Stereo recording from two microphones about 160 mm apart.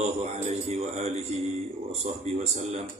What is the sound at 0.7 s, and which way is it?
Speech, 40° right (ahead or behind).